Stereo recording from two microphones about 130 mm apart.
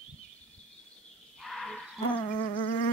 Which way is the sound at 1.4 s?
Centre (ahead or behind).